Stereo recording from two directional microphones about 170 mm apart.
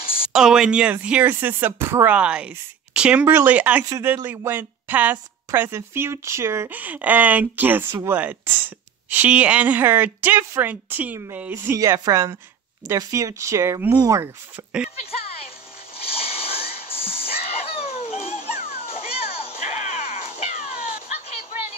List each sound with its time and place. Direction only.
0.3 s a woman's voice: 5° right (ahead or behind); by 14.7 s 20° right (ahead or behind)
15.0 s speech: 35° left (ahead or behind)
16.0 s music: 35° left (ahead or behind)